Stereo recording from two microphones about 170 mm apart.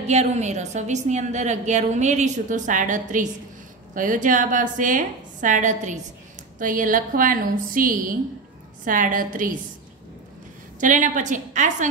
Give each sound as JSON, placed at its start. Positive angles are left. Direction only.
{"t": 0.1, "sound": "a woman's voice", "side_deg": -40}
{"t": 10.8, "sound": "a woman's voice", "side_deg": -50}